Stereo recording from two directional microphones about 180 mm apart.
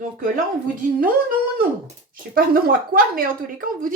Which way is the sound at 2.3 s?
55° right (ahead or behind).